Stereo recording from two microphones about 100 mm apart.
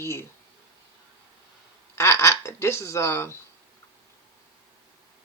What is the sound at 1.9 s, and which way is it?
A woman's voice, 30° left (ahead or behind).